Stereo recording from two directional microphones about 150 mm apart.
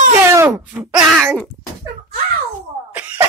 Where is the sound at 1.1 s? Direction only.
Centre (ahead or behind).